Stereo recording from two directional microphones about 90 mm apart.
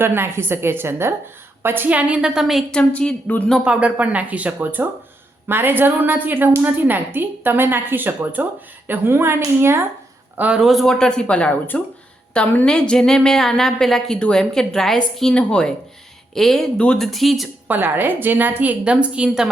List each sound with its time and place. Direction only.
0.0 s a woman's voice: 25° right (ahead or behind); by 2.6 s 5° right (ahead or behind)
2.7 s a woman's voice: 10° left (ahead or behind)
3.6 s a woman's voice: 15° right (ahead or behind)
10.3 s a man's voice: 15° right (ahead or behind)
10.6 s a woman's voice: centre (ahead or behind)
17.7 s a woman's voice: 20° right (ahead or behind)